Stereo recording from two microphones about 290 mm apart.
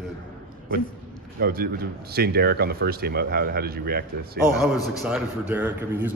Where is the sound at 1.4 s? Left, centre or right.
Right.